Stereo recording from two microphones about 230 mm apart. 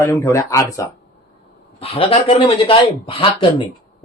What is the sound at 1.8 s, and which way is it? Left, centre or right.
Speech, left.